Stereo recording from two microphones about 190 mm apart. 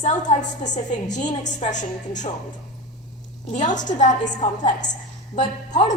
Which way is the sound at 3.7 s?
40° left (ahead or behind).